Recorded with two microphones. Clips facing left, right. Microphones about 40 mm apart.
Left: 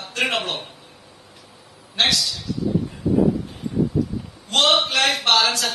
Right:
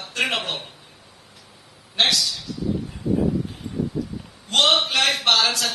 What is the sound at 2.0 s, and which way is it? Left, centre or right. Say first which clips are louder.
Speech: even; centre.